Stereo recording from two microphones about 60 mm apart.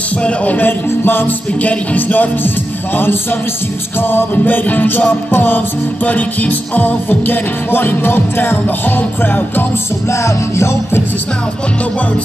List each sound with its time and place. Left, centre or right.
0.2 s music: left
1.6 s music: left
10.1 s music: left